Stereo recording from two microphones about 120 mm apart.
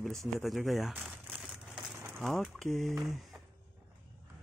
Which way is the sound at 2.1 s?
Centre (ahead or behind).